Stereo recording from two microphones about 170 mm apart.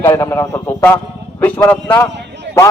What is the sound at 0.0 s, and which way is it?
A man's voice, 15° left (ahead or behind).